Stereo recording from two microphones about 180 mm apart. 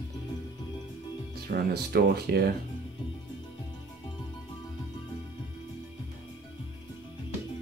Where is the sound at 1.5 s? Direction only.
60° right (ahead or behind).